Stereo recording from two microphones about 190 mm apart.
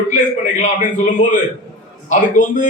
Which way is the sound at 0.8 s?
40° left (ahead or behind).